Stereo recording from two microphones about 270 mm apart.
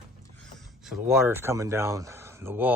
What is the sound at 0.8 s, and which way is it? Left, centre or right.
Speech, centre.